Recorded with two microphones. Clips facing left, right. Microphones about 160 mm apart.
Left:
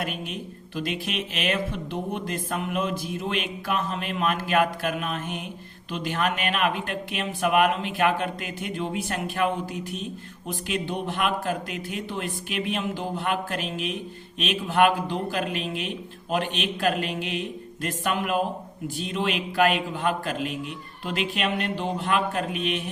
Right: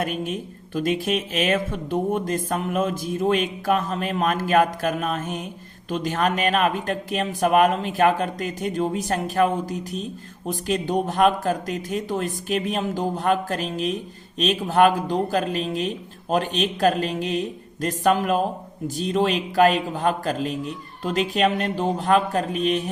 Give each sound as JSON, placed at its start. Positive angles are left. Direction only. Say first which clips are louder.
{"t": 0.0, "sound": "speech", "louder": "right 5 dB", "side_deg": -45}